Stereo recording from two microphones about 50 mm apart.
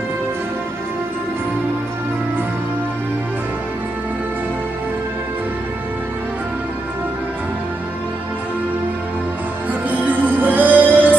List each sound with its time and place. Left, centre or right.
9.8 s music: right